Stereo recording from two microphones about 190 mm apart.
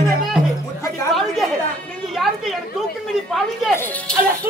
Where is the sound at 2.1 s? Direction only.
Centre (ahead or behind).